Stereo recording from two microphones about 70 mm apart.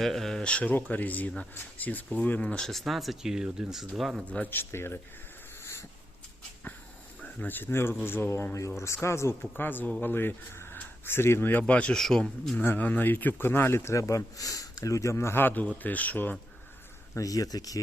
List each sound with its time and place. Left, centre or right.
0.0 s speech: centre
0.4 s speech: centre
2.6 s speech: centre
4.3 s a man's voice: left
7.2 s a man's voice: left
9.4 s speech: left
11.6 s speech: centre
11.9 s speech: centre
12.7 s a man's voice: left
17.2 s speech: left